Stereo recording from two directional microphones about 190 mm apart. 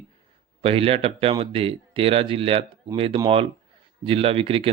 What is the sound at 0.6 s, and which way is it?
Speech, 30° right (ahead or behind).